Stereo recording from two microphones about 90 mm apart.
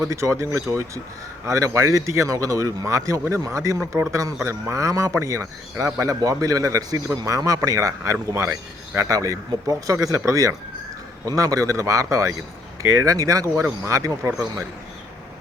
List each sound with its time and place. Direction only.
0.0 s speech: 35° right (ahead or behind)